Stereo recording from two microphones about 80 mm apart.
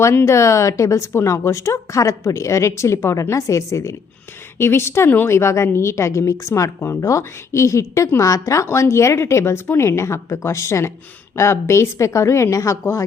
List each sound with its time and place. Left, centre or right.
0.0 s a woman's voice: left